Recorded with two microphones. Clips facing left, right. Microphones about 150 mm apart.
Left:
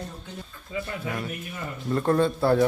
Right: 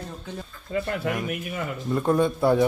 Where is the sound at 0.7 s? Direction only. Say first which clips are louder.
Right 6 dB; 55° right (ahead or behind).